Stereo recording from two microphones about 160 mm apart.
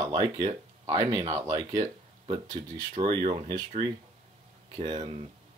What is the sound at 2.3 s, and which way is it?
Speech, 35° right (ahead or behind).